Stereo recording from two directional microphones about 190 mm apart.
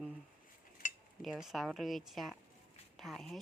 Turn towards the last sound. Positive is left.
turn(degrees=0)  # may be behind; listen again after turning